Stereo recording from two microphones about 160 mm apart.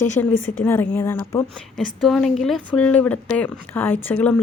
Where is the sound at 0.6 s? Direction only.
15° left (ahead or behind).